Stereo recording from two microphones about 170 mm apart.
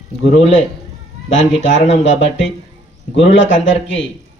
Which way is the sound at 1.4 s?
90° left.